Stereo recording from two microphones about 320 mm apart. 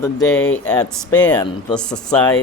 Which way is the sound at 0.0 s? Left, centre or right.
Centre.